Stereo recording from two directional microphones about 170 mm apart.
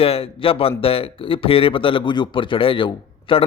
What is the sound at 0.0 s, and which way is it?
Speech, 35° left (ahead or behind).